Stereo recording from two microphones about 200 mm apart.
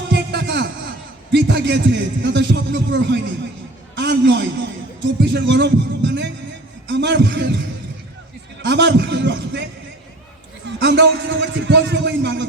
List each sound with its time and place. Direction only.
0.1 s a sound: 55° right (ahead or behind)
5.2 s a man's voice: 60° right (ahead or behind)
8.6 s a man's voice: 60° right (ahead or behind)
10.7 s a man's voice: 60° right (ahead or behind)